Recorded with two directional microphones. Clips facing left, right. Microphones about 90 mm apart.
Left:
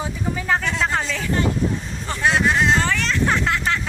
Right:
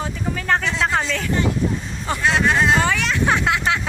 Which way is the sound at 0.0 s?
5° left (ahead or behind).